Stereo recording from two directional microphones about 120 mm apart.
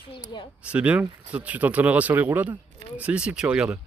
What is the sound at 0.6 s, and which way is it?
Speech, 10° right (ahead or behind).